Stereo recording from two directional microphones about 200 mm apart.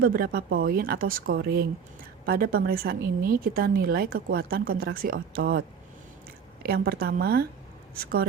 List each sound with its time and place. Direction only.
0.0 s a woman's voice: 45° right (ahead or behind)